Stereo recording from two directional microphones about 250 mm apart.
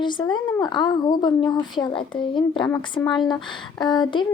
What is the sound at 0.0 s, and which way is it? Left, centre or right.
A woman's voice, centre.